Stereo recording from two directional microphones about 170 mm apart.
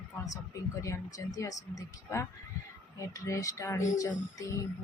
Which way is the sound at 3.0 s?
20° left (ahead or behind).